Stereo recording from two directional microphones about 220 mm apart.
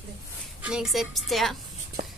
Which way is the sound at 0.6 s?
Centre (ahead or behind).